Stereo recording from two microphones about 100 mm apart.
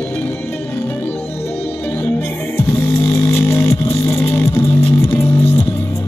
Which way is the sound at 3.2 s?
25° left (ahead or behind).